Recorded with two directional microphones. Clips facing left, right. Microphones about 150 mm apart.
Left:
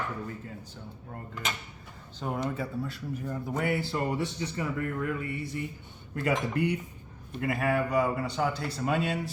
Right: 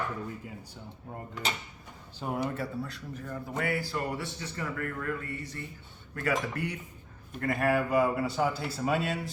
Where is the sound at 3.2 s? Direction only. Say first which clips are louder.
Left 2 dB; 20° left (ahead or behind).